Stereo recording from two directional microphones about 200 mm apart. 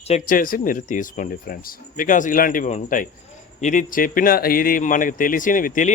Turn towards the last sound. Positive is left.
turn(degrees=40)  # may be behind; listen again after turning